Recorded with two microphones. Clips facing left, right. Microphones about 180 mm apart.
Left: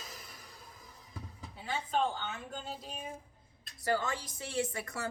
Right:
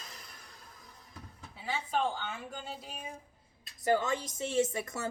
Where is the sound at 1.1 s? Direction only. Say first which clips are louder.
Left 3 dB; 5° right (ahead or behind).